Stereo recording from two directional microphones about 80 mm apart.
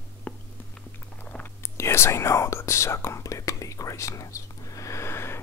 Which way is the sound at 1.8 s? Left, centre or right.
Left.